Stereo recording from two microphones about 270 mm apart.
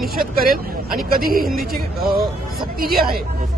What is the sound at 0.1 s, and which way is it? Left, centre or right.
Speech, right.